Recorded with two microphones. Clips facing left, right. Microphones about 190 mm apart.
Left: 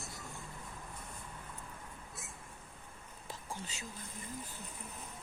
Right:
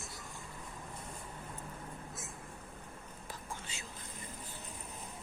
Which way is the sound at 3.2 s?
40° left (ahead or behind).